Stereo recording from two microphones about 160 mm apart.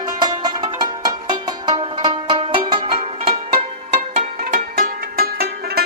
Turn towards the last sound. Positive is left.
turn(degrees=-75)  # may be behind; listen again after turning